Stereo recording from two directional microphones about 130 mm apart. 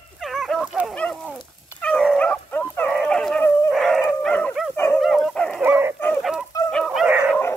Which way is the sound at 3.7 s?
Centre (ahead or behind).